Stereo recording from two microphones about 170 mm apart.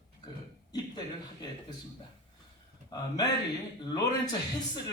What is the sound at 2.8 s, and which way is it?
Speech, 20° left (ahead or behind).